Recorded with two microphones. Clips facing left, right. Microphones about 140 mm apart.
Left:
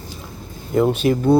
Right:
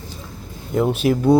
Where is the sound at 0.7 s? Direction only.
Centre (ahead or behind).